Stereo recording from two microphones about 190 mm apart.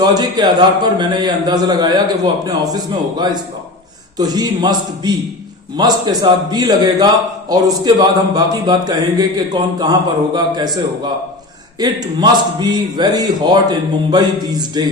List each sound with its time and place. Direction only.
0.0 s a man's voice: 20° right (ahead or behind)
11.8 s a man's voice: 20° right (ahead or behind)